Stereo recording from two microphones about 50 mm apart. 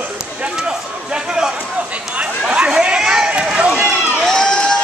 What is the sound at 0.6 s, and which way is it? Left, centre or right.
Speech, centre.